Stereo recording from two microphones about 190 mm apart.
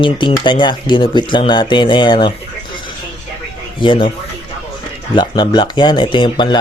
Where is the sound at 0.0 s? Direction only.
25° left (ahead or behind).